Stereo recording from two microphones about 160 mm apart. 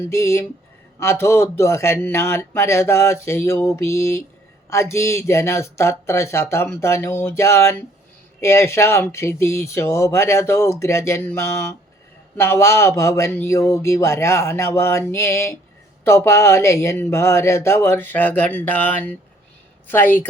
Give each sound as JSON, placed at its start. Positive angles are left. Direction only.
{"t": 0.1, "sound": "speech", "side_deg": 20}